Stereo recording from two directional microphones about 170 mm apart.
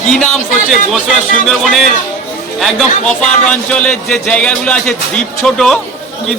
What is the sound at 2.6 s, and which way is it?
A man's voice, centre (ahead or behind).